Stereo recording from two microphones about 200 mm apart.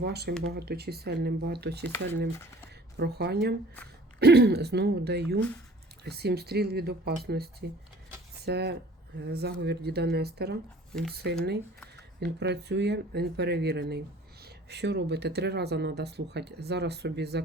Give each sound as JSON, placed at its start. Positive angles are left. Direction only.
{"t": 0.0, "sound": "speech", "side_deg": -55}
{"t": 2.3, "sound": "speech", "side_deg": 15}
{"t": 3.0, "sound": "speech", "side_deg": -55}